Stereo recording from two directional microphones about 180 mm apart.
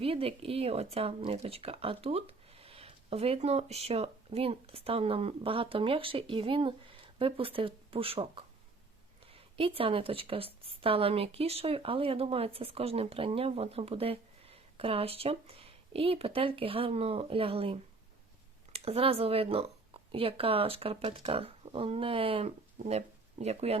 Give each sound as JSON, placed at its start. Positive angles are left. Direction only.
{"t": 0.0, "sound": "a woman's voice", "side_deg": -30}